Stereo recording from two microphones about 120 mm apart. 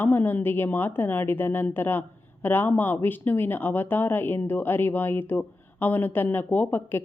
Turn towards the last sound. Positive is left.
turn(degrees=15)  # may be behind; listen again after turning